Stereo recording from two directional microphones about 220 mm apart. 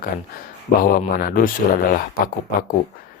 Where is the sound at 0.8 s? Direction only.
40° left (ahead or behind).